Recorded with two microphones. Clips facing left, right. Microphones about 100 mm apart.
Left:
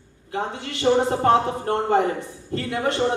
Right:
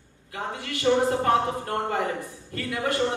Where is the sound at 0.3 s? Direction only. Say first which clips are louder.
Left 4 dB; 30° left (ahead or behind).